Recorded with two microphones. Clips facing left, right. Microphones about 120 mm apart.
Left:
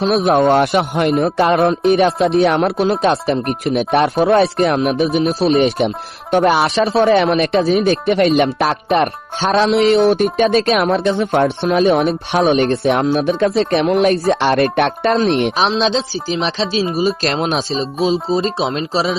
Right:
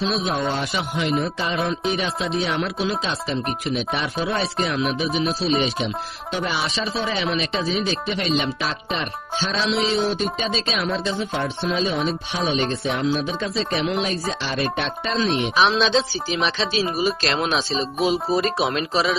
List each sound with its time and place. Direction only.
0.0 s speech: 55° left (ahead or behind)
15.5 s speech: 35° left (ahead or behind)